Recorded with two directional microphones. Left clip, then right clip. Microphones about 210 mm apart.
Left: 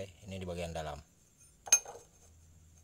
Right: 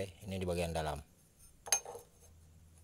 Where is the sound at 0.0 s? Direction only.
25° right (ahead or behind).